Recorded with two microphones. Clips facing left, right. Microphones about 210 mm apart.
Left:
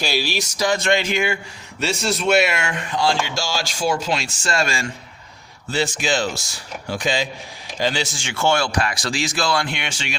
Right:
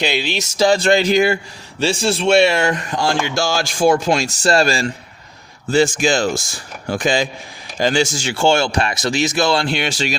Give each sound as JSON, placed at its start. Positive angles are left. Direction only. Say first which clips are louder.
{"t": 0.0, "sound": "speech", "louder": "right 3 dB", "side_deg": -20}
{"t": 5.7, "sound": "speech", "louder": "right 7 dB", "side_deg": -45}